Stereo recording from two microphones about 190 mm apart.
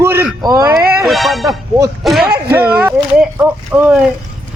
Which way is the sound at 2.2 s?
55° right (ahead or behind).